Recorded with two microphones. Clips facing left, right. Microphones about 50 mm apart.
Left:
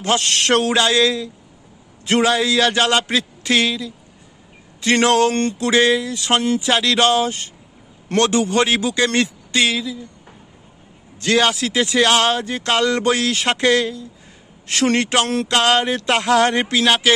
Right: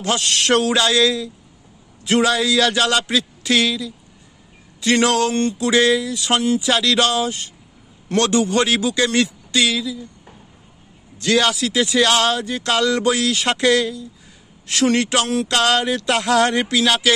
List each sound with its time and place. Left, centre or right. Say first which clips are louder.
0.0 s speech: left 1 dB; left
5.3 s music: even; left
5.7 s speech: left 1 dB; left
11.1 s speech: left 1 dB; left